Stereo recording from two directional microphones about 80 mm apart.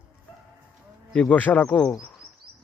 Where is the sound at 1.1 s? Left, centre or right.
Centre.